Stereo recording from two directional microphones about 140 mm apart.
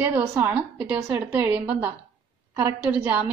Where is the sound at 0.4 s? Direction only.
10° right (ahead or behind).